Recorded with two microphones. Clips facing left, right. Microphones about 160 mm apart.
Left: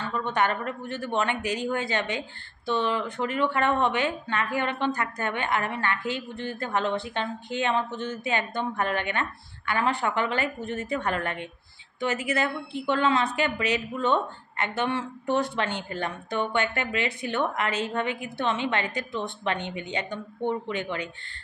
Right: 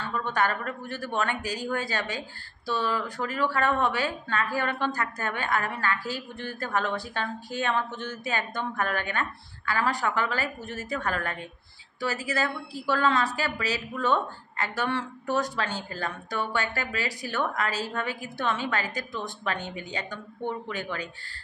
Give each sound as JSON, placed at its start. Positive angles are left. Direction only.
{"t": 0.3, "sound": "speech", "side_deg": 20}
{"t": 12.1, "sound": "a woman's voice", "side_deg": -35}
{"t": 12.4, "sound": "speech", "side_deg": 25}